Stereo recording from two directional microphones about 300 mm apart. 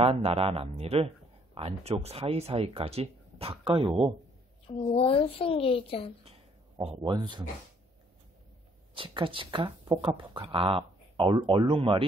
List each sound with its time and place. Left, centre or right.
0.0 s speech: centre
4.6 s a woman's voice: centre
6.9 s speech: centre
8.9 s speech: centre